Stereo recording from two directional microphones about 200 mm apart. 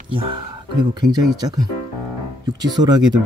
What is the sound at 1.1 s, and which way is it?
Speech, 20° right (ahead or behind).